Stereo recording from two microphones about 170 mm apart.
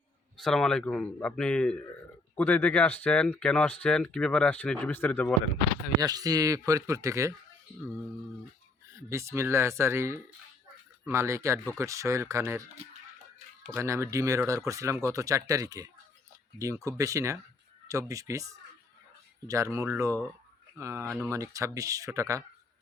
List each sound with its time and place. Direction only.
0.3 s speech: centre (ahead or behind)
6.0 s speech: 20° right (ahead or behind)
9.0 s speech: 15° right (ahead or behind)
13.7 s speech: 15° right (ahead or behind)